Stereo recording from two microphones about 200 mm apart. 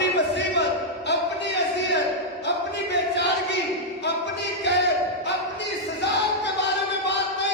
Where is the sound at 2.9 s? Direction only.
60° left (ahead or behind).